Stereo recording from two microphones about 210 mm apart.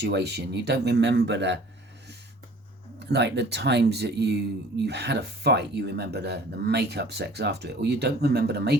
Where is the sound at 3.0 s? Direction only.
55° right (ahead or behind).